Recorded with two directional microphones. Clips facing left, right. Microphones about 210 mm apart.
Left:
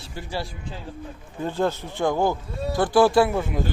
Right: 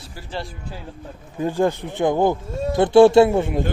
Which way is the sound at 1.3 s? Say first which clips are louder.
Right 4 dB; 15° right (ahead or behind).